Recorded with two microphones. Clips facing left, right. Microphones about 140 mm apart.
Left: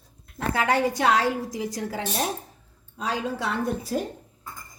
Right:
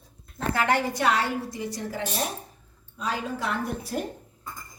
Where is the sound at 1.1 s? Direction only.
90° left.